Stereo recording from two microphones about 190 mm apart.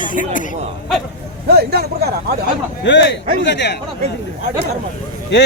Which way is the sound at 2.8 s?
70° left (ahead or behind).